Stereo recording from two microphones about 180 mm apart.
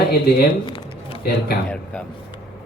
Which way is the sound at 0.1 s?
60° left (ahead or behind).